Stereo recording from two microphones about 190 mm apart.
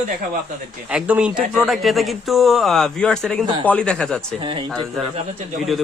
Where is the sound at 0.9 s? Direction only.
5° right (ahead or behind).